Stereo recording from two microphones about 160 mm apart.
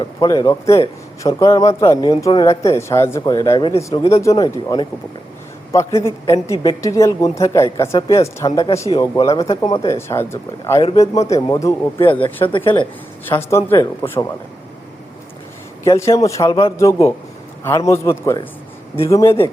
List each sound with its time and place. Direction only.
0.0 s a man's voice: 25° left (ahead or behind)
12.5 s speech: 30° left (ahead or behind)
13.5 s speech: 15° left (ahead or behind)
15.8 s a man's voice: 20° left (ahead or behind)